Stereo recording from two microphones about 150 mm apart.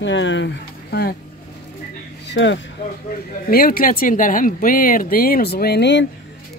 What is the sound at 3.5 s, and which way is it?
Speech, 75° left (ahead or behind).